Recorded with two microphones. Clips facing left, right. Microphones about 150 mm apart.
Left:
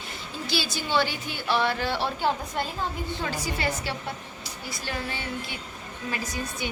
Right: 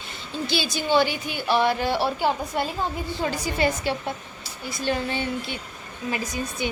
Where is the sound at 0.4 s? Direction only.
20° right (ahead or behind).